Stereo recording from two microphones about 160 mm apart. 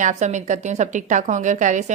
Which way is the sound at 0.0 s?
45° right (ahead or behind).